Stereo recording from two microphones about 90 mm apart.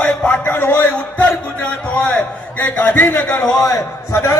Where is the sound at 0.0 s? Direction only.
10° left (ahead or behind).